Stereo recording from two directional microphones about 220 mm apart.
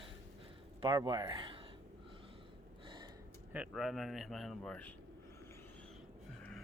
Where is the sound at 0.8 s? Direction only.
20° right (ahead or behind).